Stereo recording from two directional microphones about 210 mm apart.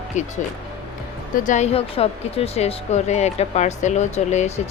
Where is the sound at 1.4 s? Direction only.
35° left (ahead or behind).